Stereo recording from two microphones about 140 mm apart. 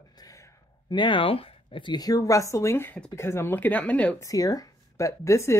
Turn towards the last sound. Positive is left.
turn(degrees=20)  # may be behind; listen again after turning